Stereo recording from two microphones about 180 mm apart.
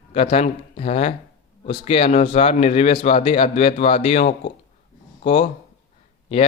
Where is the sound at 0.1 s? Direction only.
35° left (ahead or behind).